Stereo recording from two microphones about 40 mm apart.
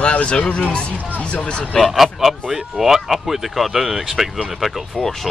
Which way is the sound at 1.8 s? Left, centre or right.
Centre.